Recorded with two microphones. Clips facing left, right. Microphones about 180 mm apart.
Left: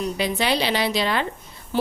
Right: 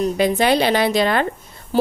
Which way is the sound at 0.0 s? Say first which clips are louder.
Right 7 dB; 50° right (ahead or behind).